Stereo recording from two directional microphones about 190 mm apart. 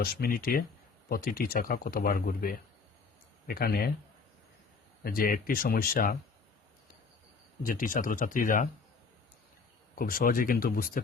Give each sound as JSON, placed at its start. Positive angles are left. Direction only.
{"t": 0.0, "sound": "speech", "side_deg": 50}
{"t": 5.0, "sound": "speech", "side_deg": 50}
{"t": 7.6, "sound": "speech", "side_deg": 50}
{"t": 9.9, "sound": "speech", "side_deg": 50}